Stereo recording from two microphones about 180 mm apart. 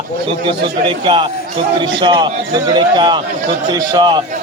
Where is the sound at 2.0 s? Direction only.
25° right (ahead or behind).